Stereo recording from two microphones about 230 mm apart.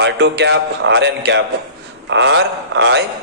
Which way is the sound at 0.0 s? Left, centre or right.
Right.